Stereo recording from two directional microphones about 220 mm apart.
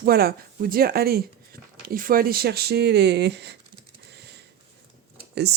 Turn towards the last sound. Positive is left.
turn(degrees=-50)  # may be behind; listen again after turning